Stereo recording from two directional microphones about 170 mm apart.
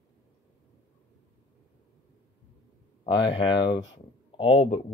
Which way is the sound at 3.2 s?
30° left (ahead or behind).